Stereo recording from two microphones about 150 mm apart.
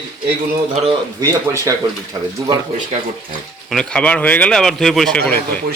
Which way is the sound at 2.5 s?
25° right (ahead or behind).